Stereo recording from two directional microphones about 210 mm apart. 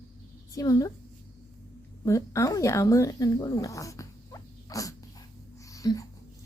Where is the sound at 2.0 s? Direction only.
15° left (ahead or behind).